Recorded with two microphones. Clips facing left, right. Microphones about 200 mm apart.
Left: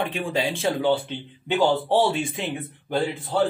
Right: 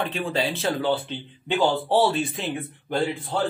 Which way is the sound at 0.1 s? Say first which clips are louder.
Even; 15° left (ahead or behind).